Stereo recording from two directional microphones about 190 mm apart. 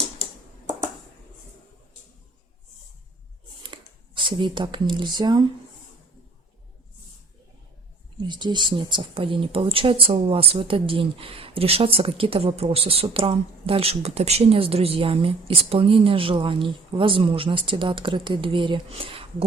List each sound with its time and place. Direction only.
3.6 s speech: 25° right (ahead or behind)
8.3 s speech: 25° right (ahead or behind)